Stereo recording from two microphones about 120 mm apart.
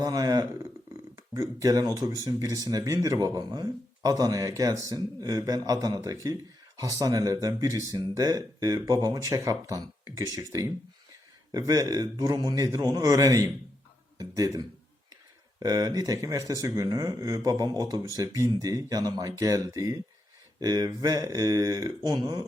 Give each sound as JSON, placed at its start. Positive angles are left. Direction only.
{"t": 0.0, "sound": "speech", "side_deg": -30}